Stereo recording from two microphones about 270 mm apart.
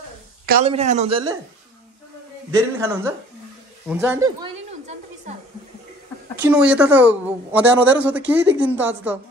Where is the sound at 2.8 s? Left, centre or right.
Centre.